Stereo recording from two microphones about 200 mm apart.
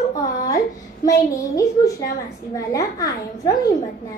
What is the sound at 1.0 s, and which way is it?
Child singing, 15° left (ahead or behind).